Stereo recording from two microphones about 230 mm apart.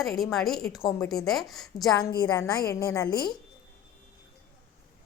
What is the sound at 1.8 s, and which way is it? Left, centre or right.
A woman's voice, centre.